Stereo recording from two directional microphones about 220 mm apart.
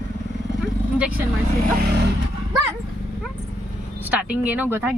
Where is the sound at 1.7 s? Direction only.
50° right (ahead or behind).